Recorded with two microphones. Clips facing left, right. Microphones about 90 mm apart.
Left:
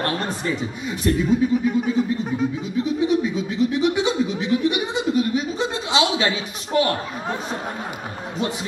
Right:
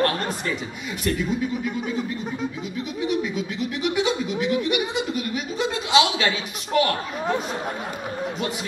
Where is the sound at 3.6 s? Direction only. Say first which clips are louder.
Left 6 dB; 30° left (ahead or behind).